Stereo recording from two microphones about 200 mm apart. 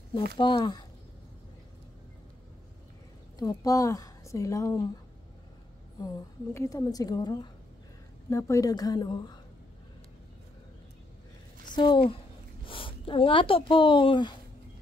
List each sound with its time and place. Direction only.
0.4 s a woman's voice: 25° left (ahead or behind)
3.3 s a woman's voice: 15° left (ahead or behind)
5.9 s a woman's voice: 20° left (ahead or behind)
11.7 s a woman's voice: 25° left (ahead or behind)